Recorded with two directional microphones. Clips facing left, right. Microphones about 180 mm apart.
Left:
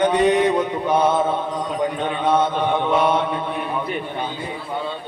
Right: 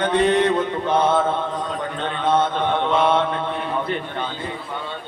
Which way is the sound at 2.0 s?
10° left (ahead or behind).